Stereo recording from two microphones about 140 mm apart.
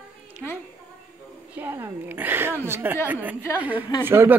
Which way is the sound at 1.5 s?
15° right (ahead or behind).